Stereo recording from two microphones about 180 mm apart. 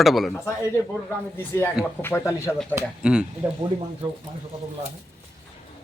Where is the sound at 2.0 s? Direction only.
15° left (ahead or behind).